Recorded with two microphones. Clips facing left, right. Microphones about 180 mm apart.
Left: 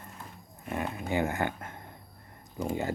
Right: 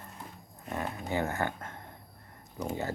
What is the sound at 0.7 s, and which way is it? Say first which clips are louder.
Speech: left 2 dB; 15° left (ahead or behind).